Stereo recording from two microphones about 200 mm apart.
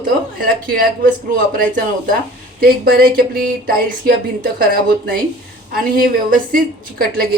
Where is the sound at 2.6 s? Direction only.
50° right (ahead or behind).